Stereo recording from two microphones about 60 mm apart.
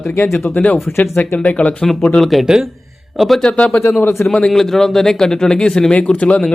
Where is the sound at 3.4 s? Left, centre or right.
Centre.